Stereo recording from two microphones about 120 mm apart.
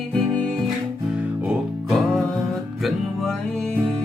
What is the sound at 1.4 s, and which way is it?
Music, 5° right (ahead or behind).